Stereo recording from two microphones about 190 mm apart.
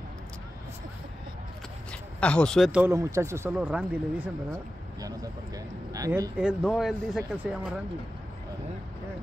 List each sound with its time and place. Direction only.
1.9 s a sound: 5° left (ahead or behind)
2.8 s speech: 15° right (ahead or behind)
5.9 s speech: 15° right (ahead or behind)
6.3 s speech: 5° right (ahead or behind)